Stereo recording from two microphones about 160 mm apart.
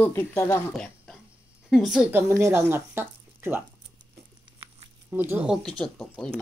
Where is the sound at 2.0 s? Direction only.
15° right (ahead or behind).